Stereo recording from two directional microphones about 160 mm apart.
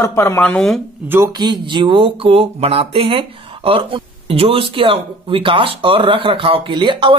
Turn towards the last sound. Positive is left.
turn(degrees=-30)  # may be behind; listen again after turning